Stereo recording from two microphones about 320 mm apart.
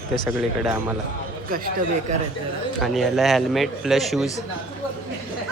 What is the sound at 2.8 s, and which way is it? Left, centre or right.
A man's voice, centre.